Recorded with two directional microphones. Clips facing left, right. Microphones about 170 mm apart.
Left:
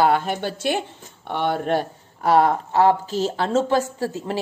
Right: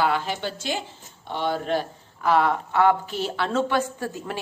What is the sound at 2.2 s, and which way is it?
Speech, 40° left (ahead or behind).